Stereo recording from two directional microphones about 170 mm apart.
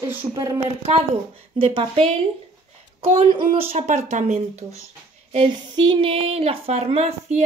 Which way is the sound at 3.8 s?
45° right (ahead or behind).